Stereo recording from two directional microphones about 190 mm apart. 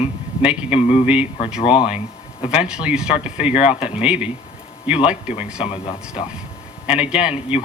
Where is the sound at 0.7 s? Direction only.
30° left (ahead or behind).